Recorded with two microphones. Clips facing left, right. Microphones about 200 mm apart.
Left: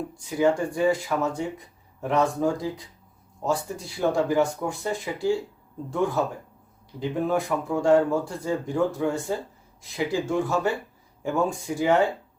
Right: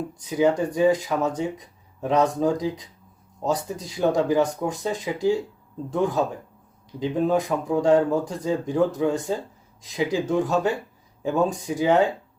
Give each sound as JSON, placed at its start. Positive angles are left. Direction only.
{"t": 0.3, "sound": "speech", "side_deg": -20}